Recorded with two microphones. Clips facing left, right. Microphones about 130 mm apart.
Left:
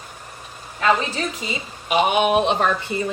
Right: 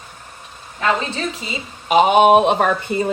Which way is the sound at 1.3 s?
30° right (ahead or behind).